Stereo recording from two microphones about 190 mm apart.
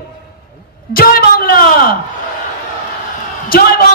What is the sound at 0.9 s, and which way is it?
A man's voice, 50° left (ahead or behind).